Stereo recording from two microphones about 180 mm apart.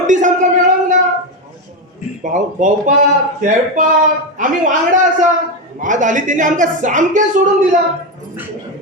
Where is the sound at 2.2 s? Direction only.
45° right (ahead or behind).